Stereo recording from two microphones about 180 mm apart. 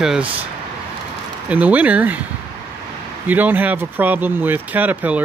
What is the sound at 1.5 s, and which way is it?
Speech, 10° right (ahead or behind).